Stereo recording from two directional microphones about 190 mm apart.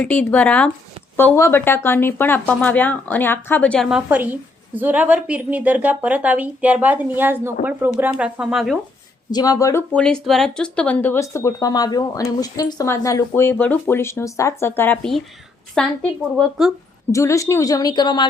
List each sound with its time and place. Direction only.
0.0 s speech: 10° left (ahead or behind)
9.3 s speech: 20° left (ahead or behind); by 15.9 s 5° left (ahead or behind)
17.1 s speech: 15° left (ahead or behind)